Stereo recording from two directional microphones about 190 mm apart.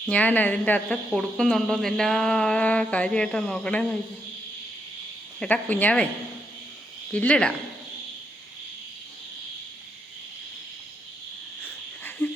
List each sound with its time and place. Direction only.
0.1 s speech: 10° left (ahead or behind)
5.4 s speech: 5° left (ahead or behind)
7.1 s speech: 5° left (ahead or behind)
11.6 s wheeze: 10° left (ahead or behind)